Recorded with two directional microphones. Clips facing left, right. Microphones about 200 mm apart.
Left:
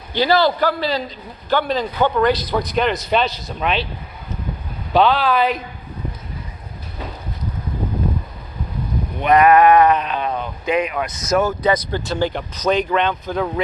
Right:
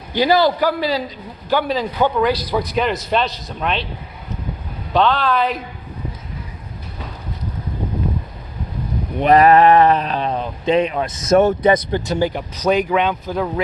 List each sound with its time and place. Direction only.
0.1 s a man's voice: 15° right (ahead or behind); by 3.8 s 5° left (ahead or behind)
4.9 s a man's voice: 5° left (ahead or behind)
9.2 s speech: 35° right (ahead or behind); by 13.5 s 5° right (ahead or behind)